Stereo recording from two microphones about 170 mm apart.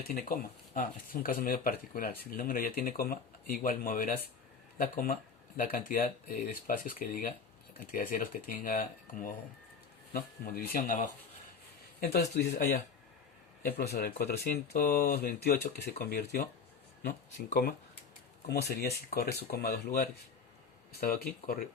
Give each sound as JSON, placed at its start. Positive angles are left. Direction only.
{"t": 0.3, "sound": "speech", "side_deg": 50}
{"t": 11.9, "sound": "speech", "side_deg": 70}